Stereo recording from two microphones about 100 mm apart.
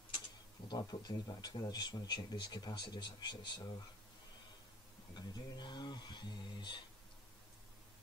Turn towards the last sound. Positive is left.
turn(degrees=50)  # may be behind; listen again after turning